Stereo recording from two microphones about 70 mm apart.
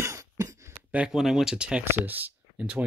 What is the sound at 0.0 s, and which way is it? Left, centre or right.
Throat clearing, right.